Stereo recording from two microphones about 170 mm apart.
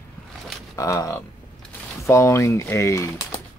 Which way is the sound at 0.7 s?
20° left (ahead or behind).